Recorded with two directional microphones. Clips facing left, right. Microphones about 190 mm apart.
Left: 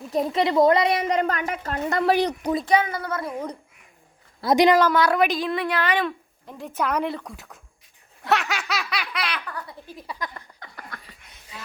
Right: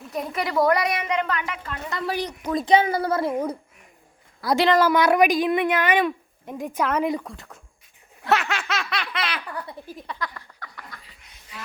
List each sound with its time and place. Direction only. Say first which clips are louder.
0.1 s a woman's voice: left 5 dB; 30° left (ahead or behind); by 2.3 s 65° left (ahead or behind)
2.6 s a woman's voice: right 7 dB; 30° right (ahead or behind)
4.4 s a woman's voice: left 3 dB; 20° left (ahead or behind)
4.8 s a woman's voice: right 2 dB; 15° right (ahead or behind)
6.8 s baby laughter: right 1 dB; centre (ahead or behind)
9.8 s a woman's voice: right 3 dB; 15° right (ahead or behind)
10.2 s a sound: right 1 dB; 20° left (ahead or behind)
10.9 s laughter: left 4 dB; 60° left (ahead or behind)